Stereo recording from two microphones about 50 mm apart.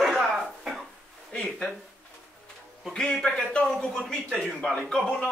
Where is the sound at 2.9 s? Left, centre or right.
Centre.